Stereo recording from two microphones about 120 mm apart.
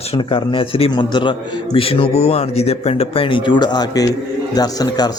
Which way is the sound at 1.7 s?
50° left (ahead or behind).